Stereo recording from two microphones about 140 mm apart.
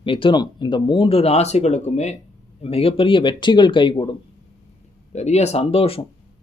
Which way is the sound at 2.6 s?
45° left (ahead or behind).